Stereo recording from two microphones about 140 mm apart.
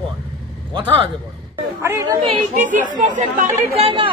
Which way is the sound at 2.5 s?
65° right (ahead or behind).